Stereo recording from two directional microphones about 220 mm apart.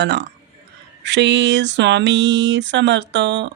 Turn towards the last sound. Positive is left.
turn(degrees=-50)  # may be behind; listen again after turning